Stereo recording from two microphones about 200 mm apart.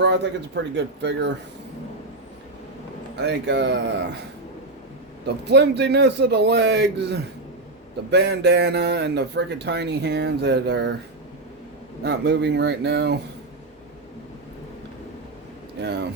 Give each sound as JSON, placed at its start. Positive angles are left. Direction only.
{"t": 0.0, "sound": "a man's voice", "side_deg": -60}
{"t": 3.2, "sound": "a man's voice", "side_deg": -60}
{"t": 5.2, "sound": "a man's voice", "side_deg": -55}
{"t": 12.0, "sound": "a man's voice", "side_deg": -60}